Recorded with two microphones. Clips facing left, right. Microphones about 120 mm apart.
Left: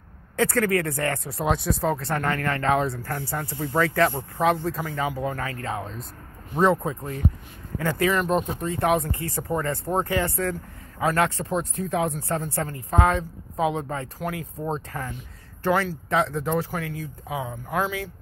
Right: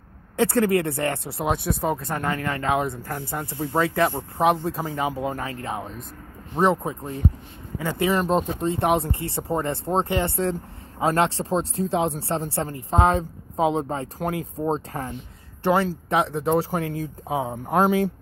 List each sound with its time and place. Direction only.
0.4 s speech: 25° right (ahead or behind)
1.4 s speech: centre (ahead or behind)
1.8 s speech: 20° right (ahead or behind)
16.7 s speech: 40° right (ahead or behind)